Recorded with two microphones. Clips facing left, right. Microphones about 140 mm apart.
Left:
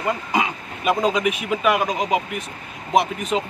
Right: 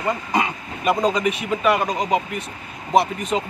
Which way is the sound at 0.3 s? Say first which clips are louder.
Even; 5° left (ahead or behind).